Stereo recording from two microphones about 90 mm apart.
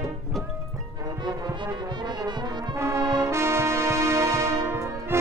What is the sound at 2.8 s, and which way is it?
Brass instrument, 30° right (ahead or behind).